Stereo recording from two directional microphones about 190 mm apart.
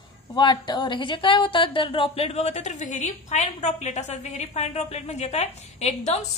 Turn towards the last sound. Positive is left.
turn(degrees=35)  # may be behind; listen again after turning